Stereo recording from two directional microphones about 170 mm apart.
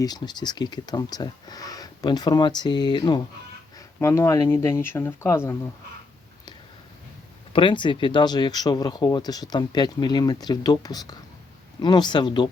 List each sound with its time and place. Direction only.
0.0 s speech: 25° left (ahead or behind)
7.5 s speech: 30° left (ahead or behind)